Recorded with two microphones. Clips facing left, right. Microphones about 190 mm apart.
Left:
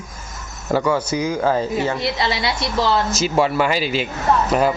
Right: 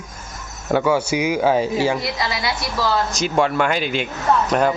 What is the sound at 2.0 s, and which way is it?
Speech, 25° left (ahead or behind).